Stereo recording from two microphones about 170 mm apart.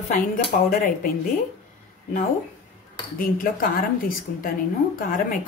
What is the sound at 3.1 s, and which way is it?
A woman's voice, 55° left (ahead or behind).